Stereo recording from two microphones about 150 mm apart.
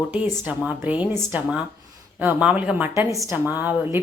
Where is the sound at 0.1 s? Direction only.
10° right (ahead or behind).